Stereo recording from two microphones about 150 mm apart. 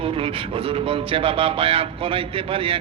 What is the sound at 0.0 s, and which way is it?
Speech, 40° right (ahead or behind).